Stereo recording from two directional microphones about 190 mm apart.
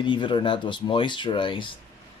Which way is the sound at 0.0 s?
25° left (ahead or behind).